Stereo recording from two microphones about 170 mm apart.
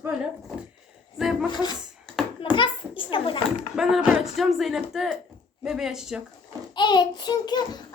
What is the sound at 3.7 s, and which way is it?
Speech, centre (ahead or behind).